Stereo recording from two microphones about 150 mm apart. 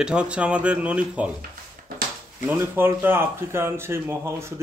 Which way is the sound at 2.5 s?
15° right (ahead or behind).